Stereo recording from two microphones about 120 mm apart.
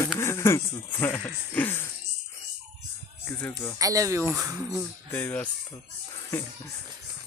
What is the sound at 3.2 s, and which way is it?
Speech, 15° left (ahead or behind).